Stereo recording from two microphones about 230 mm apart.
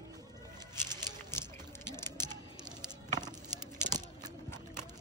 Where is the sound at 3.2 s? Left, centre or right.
Centre.